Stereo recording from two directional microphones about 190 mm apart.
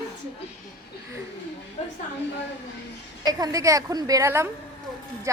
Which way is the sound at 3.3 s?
20° right (ahead or behind).